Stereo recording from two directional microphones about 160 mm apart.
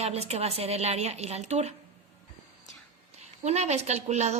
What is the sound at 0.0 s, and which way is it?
Speech, 40° right (ahead or behind).